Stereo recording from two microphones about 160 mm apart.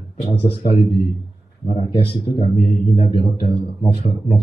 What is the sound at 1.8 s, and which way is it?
A man's voice, 35° left (ahead or behind).